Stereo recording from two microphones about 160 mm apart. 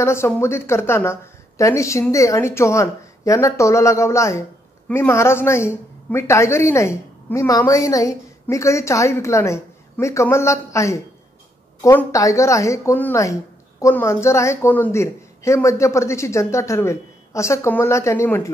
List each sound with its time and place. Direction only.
0.0 s a woman's voice: 15° left (ahead or behind)